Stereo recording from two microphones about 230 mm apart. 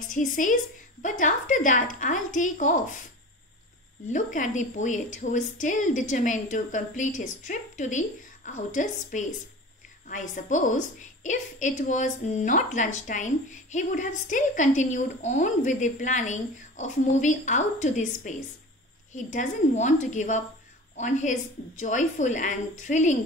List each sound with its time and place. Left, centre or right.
0.0 s a woman's voice: left
4.1 s a woman's voice: left